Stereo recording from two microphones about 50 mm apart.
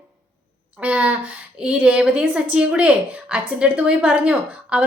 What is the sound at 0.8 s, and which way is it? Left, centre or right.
A woman's voice, right.